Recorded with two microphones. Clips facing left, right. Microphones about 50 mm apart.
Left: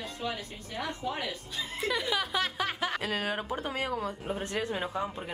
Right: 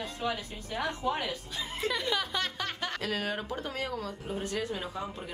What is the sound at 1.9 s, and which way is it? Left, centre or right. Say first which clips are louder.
Speech: left 3 dB; centre.